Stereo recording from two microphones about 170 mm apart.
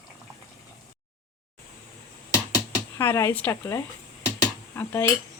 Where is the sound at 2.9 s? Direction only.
15° left (ahead or behind).